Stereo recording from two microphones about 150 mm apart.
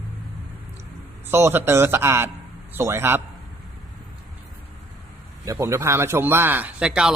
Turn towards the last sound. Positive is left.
turn(degrees=-5)  # may be behind; listen again after turning